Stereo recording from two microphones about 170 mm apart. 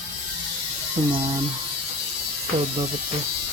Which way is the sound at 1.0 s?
25° right (ahead or behind).